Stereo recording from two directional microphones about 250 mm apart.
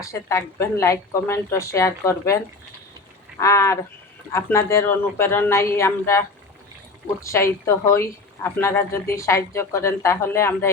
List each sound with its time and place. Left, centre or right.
0.0 s speech: centre